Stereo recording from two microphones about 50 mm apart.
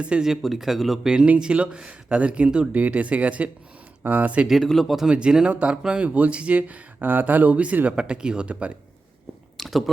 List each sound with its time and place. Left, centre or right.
0.2 s speech: centre
1.4 s speech: centre
4.4 s speech: centre
5.0 s speech: centre
9.6 s a sound: centre